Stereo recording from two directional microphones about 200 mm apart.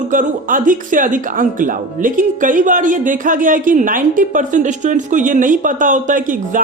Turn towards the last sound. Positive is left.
turn(degrees=-40)  # may be behind; listen again after turning